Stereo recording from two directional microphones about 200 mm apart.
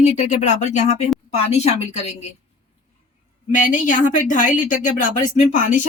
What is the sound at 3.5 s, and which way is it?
Speech, 40° left (ahead or behind).